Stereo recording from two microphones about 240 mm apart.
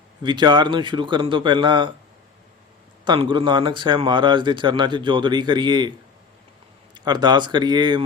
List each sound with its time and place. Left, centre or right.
0.2 s speech: centre
3.0 s speech: centre
6.9 s speech: centre